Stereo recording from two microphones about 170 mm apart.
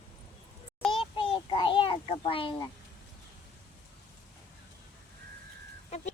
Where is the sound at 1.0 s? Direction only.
30° left (ahead or behind).